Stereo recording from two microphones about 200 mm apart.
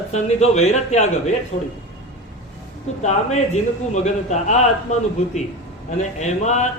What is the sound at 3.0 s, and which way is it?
A man's voice, 35° left (ahead or behind).